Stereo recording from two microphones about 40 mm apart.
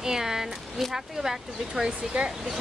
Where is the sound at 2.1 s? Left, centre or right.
Right.